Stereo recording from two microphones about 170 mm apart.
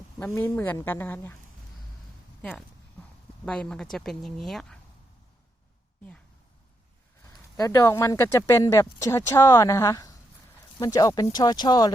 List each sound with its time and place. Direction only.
0.2 s speech: 10° left (ahead or behind)
2.4 s speech: centre (ahead or behind)
7.5 s speech: 20° left (ahead or behind)